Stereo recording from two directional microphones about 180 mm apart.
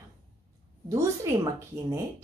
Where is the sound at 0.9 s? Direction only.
15° right (ahead or behind).